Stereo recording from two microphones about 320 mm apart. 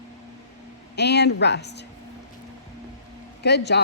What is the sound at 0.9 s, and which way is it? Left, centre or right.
Speech, left.